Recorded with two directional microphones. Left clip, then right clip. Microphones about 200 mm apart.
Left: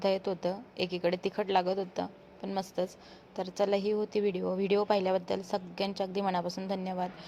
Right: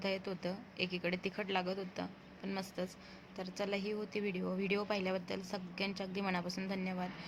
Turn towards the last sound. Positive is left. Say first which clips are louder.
# left 7 dB
turn(degrees=15)  # may be behind; listen again after turning